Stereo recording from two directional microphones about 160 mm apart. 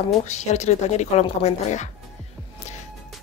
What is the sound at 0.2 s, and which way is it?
Speech, 45° left (ahead or behind).